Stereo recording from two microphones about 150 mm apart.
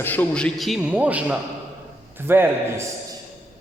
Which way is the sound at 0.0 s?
10° left (ahead or behind).